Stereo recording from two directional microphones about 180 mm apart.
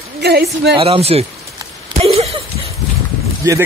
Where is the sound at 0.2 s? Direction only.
65° right (ahead or behind).